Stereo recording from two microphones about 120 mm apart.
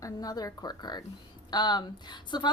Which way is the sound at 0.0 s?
30° left (ahead or behind).